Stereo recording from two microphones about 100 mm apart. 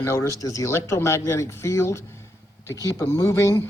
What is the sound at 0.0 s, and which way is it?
A man's voice, 30° left (ahead or behind).